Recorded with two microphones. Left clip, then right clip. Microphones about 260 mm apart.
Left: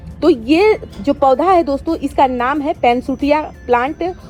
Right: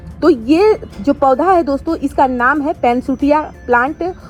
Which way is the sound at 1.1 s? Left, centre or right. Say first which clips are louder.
Even; right.